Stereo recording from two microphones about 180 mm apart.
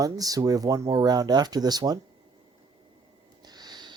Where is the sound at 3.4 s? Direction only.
20° right (ahead or behind).